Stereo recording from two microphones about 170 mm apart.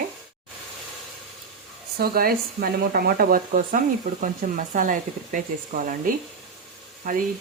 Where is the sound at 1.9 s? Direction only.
60° right (ahead or behind).